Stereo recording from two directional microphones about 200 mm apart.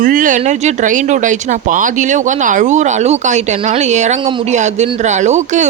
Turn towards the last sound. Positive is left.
turn(degrees=-35)  # may be behind; listen again after turning